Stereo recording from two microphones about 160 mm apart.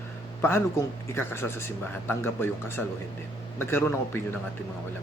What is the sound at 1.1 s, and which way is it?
Speech, 15° left (ahead or behind).